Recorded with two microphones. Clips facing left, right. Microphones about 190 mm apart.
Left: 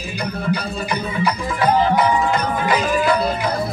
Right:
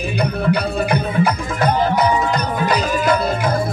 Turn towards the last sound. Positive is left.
turn(degrees=-45)  # may be behind; listen again after turning